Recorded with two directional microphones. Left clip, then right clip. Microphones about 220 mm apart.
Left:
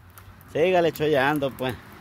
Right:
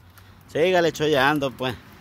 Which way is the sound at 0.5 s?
10° right (ahead or behind).